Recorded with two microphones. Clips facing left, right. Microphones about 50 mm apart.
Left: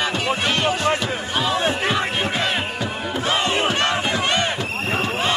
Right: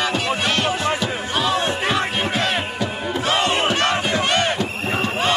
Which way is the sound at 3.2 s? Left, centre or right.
Right.